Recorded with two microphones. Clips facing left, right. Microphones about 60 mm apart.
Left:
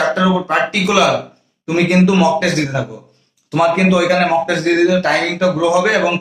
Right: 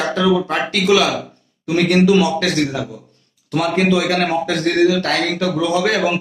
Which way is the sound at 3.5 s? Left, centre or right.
Centre.